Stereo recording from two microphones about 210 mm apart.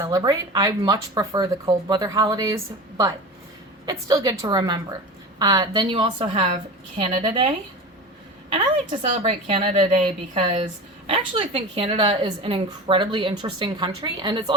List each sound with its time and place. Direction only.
0.0 s speech: 15° right (ahead or behind)
3.8 s a woman's voice: 15° right (ahead or behind)